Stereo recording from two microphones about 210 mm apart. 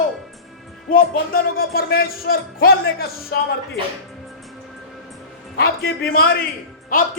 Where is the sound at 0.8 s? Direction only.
45° left (ahead or behind).